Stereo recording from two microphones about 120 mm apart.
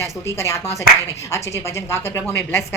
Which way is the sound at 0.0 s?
25° left (ahead or behind).